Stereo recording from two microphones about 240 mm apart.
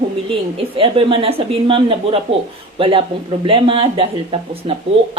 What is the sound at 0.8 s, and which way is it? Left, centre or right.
Speech, right.